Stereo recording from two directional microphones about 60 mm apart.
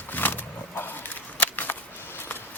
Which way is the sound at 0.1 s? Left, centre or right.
Left.